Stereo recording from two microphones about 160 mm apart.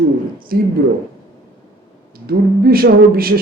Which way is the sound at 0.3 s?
65° right (ahead or behind).